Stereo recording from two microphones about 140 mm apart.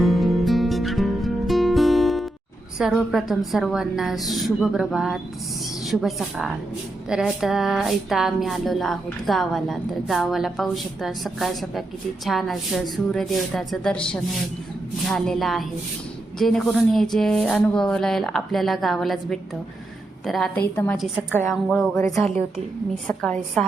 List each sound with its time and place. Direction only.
0.0 s music: centre (ahead or behind)
2.7 s a woman's voice: centre (ahead or behind)
20.6 s a woman's voice: 15° left (ahead or behind)
22.0 s a woman's voice: 20° left (ahead or behind)
23.0 s a woman's voice: 5° left (ahead or behind)